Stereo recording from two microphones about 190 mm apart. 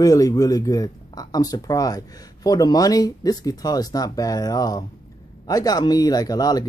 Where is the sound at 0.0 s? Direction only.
20° left (ahead or behind).